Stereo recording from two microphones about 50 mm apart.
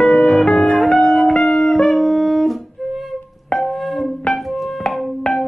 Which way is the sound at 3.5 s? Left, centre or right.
Centre.